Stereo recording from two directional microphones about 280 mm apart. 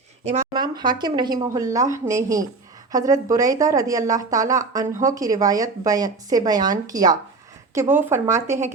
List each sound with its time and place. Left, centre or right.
0.3 s a woman's voice: centre